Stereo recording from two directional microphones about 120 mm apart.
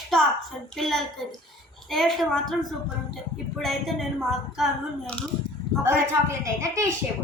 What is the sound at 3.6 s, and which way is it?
A woman's voice, centre (ahead or behind).